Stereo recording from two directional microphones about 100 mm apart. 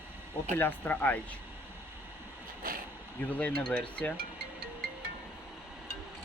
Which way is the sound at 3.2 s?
15° left (ahead or behind).